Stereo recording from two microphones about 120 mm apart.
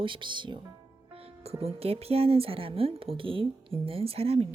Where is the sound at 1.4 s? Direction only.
60° right (ahead or behind).